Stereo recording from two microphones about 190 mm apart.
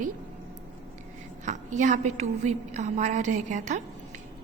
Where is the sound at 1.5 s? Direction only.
40° right (ahead or behind).